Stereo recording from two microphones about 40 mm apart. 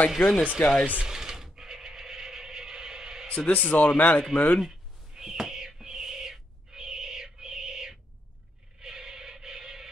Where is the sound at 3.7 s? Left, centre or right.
Left.